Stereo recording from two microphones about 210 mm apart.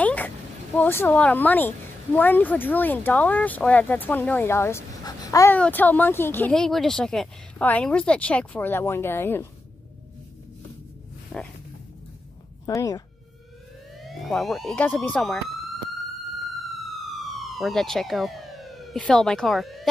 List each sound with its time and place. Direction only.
0.0 s a sound: 10° left (ahead or behind)
0.7 s speech: 10° left (ahead or behind)
11.3 s a sound: 5° left (ahead or behind)
12.6 s speech: 15° left (ahead or behind)
13.9 s speech: centre (ahead or behind)
17.0 s police car: centre (ahead or behind)